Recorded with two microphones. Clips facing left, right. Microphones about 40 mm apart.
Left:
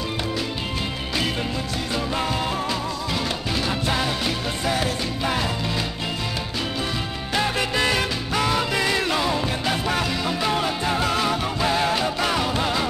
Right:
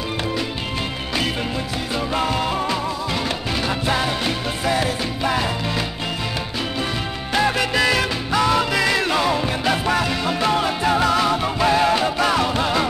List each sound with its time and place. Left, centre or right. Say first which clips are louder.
2.1 s music: right 5 dB; centre
3.6 s music: right 3 dB; centre
7.3 s music: right 4 dB; centre
8.8 s music: right 3 dB; centre
11.4 s music: right 4 dB; centre